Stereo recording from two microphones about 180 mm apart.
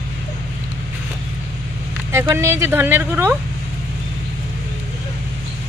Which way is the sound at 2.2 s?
15° right (ahead or behind).